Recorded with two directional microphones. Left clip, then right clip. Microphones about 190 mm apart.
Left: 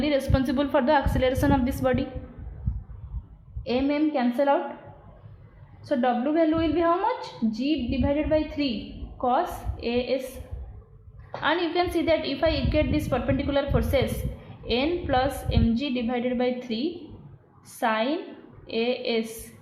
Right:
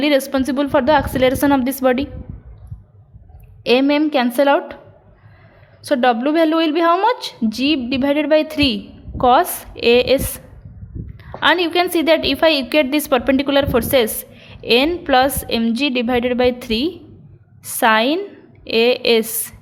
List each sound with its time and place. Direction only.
0.0 s a woman's voice: 45° right (ahead or behind)
3.6 s a woman's voice: 55° right (ahead or behind)
5.8 s a woman's voice: 60° right (ahead or behind)
11.3 s a woman's voice: 50° right (ahead or behind)